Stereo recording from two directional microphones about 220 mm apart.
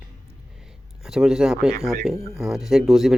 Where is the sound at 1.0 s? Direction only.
5° right (ahead or behind).